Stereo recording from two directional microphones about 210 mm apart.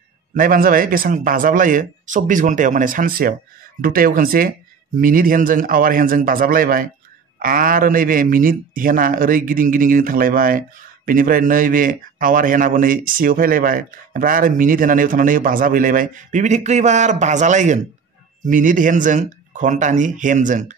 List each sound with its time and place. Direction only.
0.4 s a man's voice: 40° right (ahead or behind)